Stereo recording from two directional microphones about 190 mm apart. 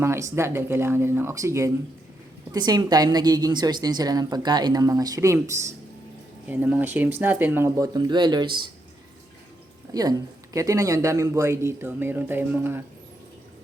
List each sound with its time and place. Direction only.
0.0 s a woman's voice: 15° right (ahead or behind)
9.9 s speech: 20° right (ahead or behind)